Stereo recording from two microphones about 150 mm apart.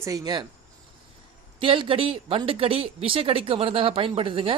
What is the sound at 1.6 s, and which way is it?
Speech, 35° right (ahead or behind).